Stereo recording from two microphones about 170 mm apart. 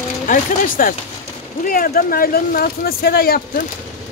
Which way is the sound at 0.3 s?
55° left (ahead or behind).